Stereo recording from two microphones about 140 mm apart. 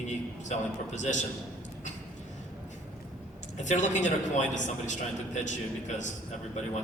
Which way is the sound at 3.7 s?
60° left (ahead or behind).